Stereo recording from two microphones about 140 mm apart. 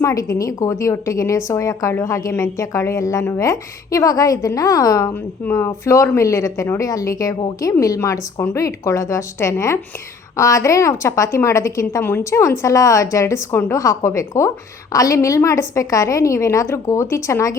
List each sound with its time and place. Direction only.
0.0 s a woman's voice: 25° left (ahead or behind)